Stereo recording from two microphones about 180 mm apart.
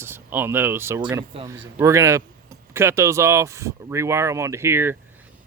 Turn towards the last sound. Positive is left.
turn(degrees=-15)  # may be behind; listen again after turning